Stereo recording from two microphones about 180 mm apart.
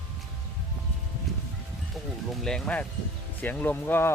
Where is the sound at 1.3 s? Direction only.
Centre (ahead or behind).